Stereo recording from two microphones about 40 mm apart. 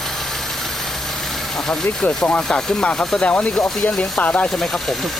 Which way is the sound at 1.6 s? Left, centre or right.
Centre.